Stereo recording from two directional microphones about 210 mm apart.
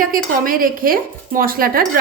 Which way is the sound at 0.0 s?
40° right (ahead or behind).